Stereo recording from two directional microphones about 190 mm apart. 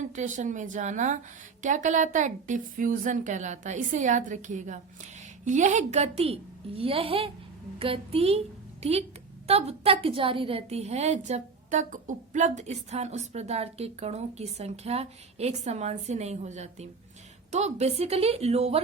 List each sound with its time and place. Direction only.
0.1 s a woman's voice: 40° right (ahead or behind)